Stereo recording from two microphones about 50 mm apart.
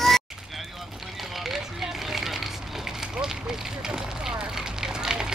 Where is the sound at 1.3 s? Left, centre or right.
Centre.